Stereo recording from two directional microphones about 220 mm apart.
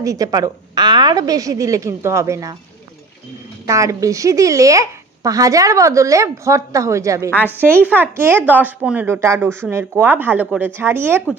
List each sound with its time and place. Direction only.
0.0 s speech: 15° right (ahead or behind)
3.6 s speech: 15° right (ahead or behind)
7.2 s a woman's voice: 10° left (ahead or behind)
7.9 s speech: 10° right (ahead or behind)